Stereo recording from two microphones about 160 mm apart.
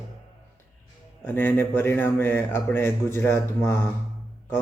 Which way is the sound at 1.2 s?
10° left (ahead or behind).